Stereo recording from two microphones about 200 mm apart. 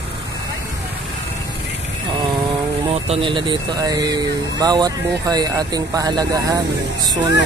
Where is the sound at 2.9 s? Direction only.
30° right (ahead or behind).